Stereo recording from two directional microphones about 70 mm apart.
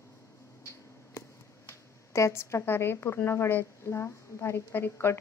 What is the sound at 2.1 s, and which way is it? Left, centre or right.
A woman's voice, left.